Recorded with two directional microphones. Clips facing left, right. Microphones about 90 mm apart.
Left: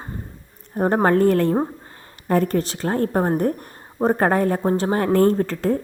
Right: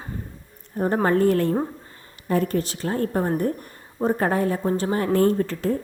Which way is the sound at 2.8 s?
40° left (ahead or behind).